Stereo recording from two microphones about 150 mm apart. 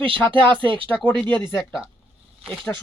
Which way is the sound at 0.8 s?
10° left (ahead or behind).